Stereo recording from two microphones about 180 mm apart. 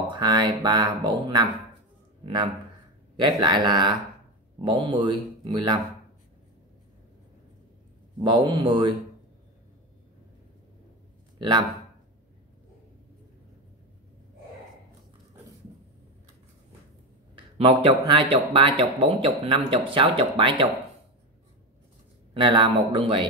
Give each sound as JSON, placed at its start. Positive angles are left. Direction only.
{"t": 0.1, "sound": "speech", "side_deg": -25}
{"t": 8.2, "sound": "speech", "side_deg": -25}
{"t": 11.3, "sound": "speech", "side_deg": -25}
{"t": 17.6, "sound": "speech", "side_deg": -30}
{"t": 22.3, "sound": "speech", "side_deg": -25}